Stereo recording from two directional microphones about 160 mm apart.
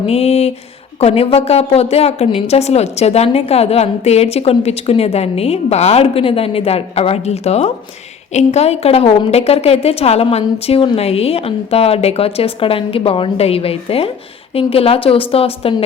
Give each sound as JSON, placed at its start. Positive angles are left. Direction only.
{"t": 0.0, "sound": "a woman's voice", "side_deg": 40}